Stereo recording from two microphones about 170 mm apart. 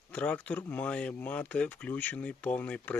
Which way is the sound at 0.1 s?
10° left (ahead or behind).